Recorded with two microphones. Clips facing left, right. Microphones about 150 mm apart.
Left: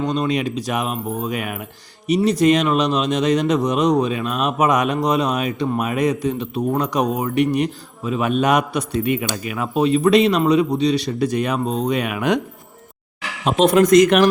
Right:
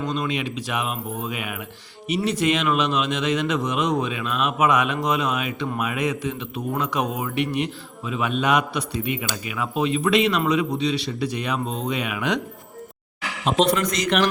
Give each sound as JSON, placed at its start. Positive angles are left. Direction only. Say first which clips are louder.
{"t": 0.0, "sound": "a man's voice", "louder": "left 5 dB", "side_deg": 35}
{"t": 13.4, "sound": "speech", "louder": "left 6 dB", "side_deg": 50}